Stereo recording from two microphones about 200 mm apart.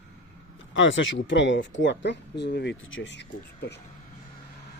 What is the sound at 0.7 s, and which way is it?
Speech, 70° left (ahead or behind).